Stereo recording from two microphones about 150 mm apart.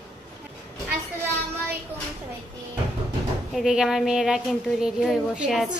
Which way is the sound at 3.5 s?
5° right (ahead or behind).